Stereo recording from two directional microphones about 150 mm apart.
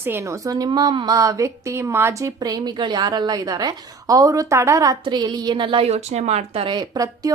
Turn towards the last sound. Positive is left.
turn(degrees=-25)  # may be behind; listen again after turning